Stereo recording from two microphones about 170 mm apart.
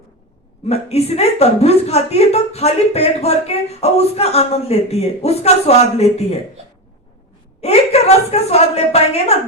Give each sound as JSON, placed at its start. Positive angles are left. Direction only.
{"t": 0.7, "sound": "a woman's voice", "side_deg": 40}
{"t": 7.6, "sound": "a woman's voice", "side_deg": 40}